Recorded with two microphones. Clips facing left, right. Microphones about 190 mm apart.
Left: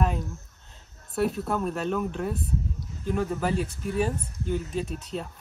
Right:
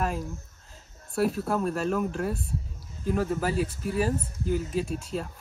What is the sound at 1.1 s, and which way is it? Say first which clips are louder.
Speech: even; centre (ahead or behind).